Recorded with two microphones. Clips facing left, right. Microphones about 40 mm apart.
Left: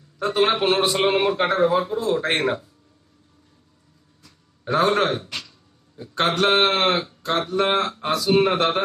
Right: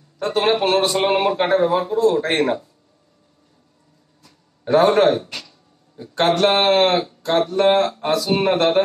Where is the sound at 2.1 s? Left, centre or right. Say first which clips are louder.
Right 3 dB; left.